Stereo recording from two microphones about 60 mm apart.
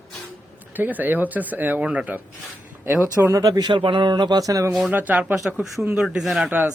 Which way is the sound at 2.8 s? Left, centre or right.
Right.